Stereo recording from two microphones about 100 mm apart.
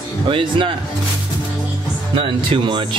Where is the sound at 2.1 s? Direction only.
60° right (ahead or behind).